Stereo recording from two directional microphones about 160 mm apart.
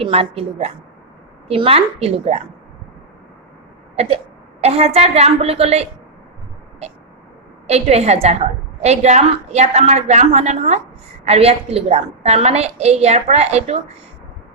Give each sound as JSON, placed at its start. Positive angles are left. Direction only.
{"t": 0.0, "sound": "a woman's voice", "side_deg": -35}
{"t": 4.0, "sound": "a sound", "side_deg": -40}
{"t": 4.6, "sound": "a woman's voice", "side_deg": -40}
{"t": 7.7, "sound": "a woman's voice", "side_deg": -40}